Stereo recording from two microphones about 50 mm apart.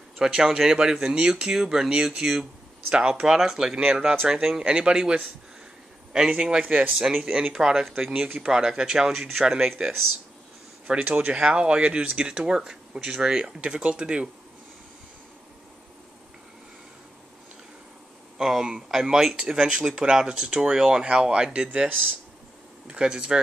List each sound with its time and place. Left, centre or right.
0.2 s speech: centre
6.9 s speech: centre
7.3 s speech: centre
8.1 s speech: right
8.4 s speech: centre
11.1 s speech: right
18.4 s speech: centre
22.8 s speech: centre